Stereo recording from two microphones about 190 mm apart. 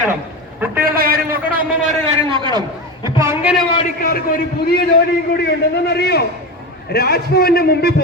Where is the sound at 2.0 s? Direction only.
30° right (ahead or behind).